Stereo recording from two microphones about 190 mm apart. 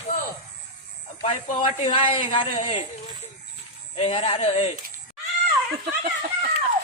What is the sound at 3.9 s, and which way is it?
Speech, 30° left (ahead or behind).